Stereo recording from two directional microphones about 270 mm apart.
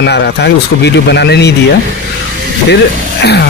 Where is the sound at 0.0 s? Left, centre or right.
Left.